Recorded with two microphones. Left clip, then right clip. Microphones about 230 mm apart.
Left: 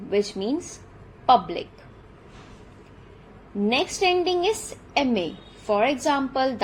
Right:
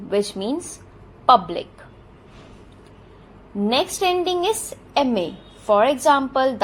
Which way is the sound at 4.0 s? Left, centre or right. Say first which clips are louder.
Right 1 dB; right.